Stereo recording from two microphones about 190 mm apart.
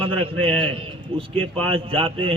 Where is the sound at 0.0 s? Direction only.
30° right (ahead or behind).